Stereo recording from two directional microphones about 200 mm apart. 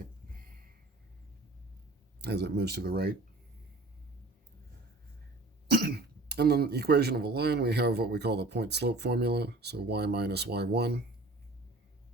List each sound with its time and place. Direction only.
2.2 s speech: 55° right (ahead or behind)
5.6 s speech: 50° right (ahead or behind)